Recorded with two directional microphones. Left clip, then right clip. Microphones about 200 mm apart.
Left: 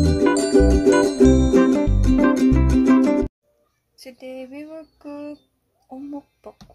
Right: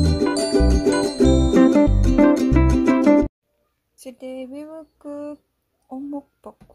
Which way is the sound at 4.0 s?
5° left (ahead or behind).